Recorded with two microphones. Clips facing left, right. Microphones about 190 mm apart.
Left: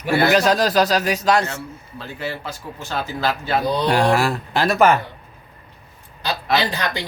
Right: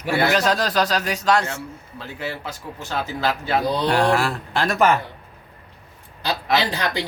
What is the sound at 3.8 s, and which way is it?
Speech, 10° left (ahead or behind).